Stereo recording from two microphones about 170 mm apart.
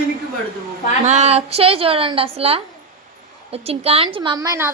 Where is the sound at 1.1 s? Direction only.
40° right (ahead or behind).